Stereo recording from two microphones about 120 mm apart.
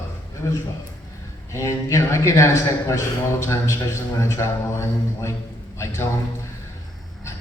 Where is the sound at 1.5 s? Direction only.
25° left (ahead or behind).